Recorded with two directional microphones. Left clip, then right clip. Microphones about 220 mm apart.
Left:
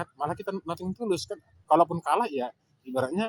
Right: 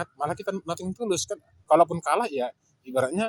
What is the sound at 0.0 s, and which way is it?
Speech, 10° right (ahead or behind).